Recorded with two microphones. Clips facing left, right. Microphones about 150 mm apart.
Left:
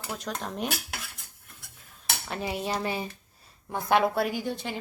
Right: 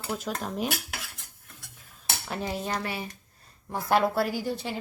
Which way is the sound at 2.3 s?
5° left (ahead or behind).